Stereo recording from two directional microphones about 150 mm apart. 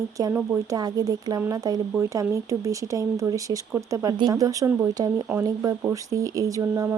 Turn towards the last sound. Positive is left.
turn(degrees=-20)  # may be behind; listen again after turning